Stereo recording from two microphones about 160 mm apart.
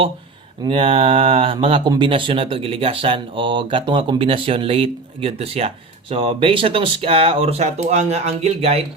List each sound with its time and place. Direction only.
0.6 s speech: 35° right (ahead or behind)